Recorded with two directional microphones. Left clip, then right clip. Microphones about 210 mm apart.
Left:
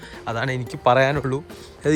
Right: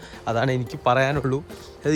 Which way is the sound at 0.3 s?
25° right (ahead or behind).